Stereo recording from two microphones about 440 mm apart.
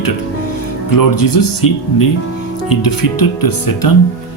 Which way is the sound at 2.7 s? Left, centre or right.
Left.